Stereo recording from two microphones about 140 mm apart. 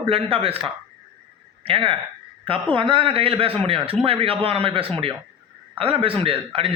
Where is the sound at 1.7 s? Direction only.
40° right (ahead or behind).